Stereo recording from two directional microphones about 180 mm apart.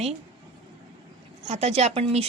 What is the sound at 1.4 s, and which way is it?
Speech, 40° right (ahead or behind).